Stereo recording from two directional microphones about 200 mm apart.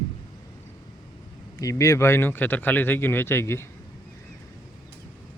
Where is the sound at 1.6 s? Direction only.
15° left (ahead or behind).